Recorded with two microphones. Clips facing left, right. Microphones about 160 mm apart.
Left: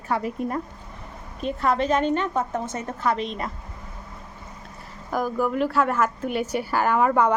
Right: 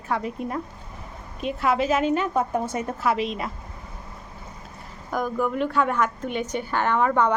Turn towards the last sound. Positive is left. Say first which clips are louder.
# left 1 dB
turn(degrees=5)  # may be behind; listen again after turning